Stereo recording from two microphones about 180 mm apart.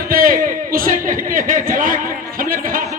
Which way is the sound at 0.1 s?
50° right (ahead or behind).